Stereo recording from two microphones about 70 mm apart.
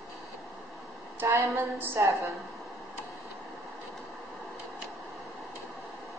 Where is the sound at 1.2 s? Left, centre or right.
Right.